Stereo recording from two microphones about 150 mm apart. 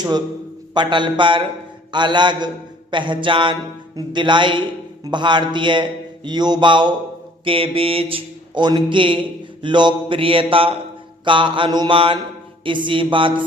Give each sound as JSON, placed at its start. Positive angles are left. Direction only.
{"t": 0.7, "sound": "speech", "side_deg": -30}